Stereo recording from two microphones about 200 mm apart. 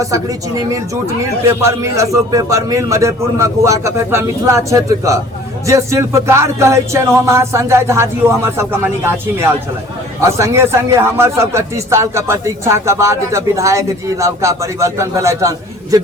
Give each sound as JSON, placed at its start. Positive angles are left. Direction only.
{"t": 0.0, "sound": "speech", "side_deg": -15}